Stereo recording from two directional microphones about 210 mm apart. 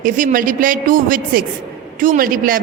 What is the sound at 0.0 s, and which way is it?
A woman's voice, 40° right (ahead or behind).